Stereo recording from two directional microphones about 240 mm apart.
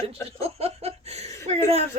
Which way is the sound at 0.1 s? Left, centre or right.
Right.